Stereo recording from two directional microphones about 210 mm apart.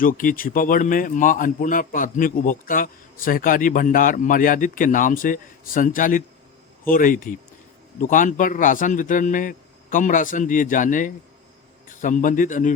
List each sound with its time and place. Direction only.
0.0 s speech: 40° left (ahead or behind)